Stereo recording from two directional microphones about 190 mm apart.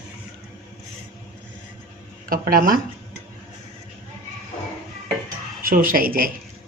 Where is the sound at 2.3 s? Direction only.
50° right (ahead or behind).